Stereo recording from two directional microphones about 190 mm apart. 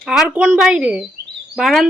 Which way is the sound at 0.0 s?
Centre (ahead or behind).